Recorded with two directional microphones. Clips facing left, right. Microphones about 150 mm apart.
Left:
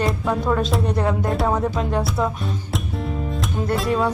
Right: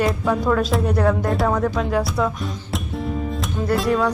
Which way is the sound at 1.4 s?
20° left (ahead or behind).